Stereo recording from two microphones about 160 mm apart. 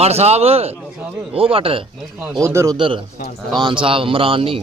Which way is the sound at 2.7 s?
35° right (ahead or behind).